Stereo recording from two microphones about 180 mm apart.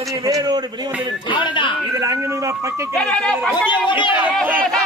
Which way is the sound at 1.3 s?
25° left (ahead or behind).